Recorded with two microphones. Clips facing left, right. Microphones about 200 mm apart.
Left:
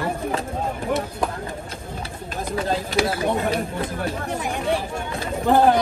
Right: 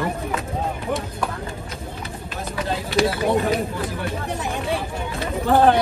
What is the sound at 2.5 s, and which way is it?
Speech, 35° left (ahead or behind).